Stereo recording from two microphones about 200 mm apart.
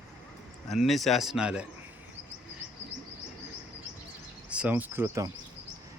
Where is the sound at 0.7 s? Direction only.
Centre (ahead or behind).